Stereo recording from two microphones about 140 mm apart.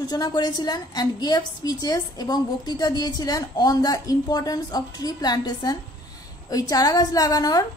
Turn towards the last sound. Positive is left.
turn(degrees=30)  # may be behind; listen again after turning